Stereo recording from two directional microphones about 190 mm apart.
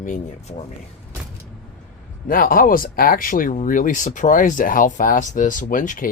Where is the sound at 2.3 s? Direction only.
50° left (ahead or behind).